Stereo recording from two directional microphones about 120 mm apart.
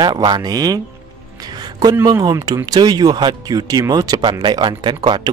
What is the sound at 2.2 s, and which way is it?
Speech, 35° right (ahead or behind).